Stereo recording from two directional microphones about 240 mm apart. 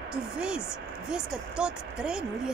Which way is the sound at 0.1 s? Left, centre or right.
Centre.